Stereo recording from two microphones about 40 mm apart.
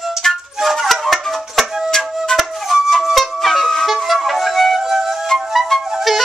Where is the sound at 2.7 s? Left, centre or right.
Centre.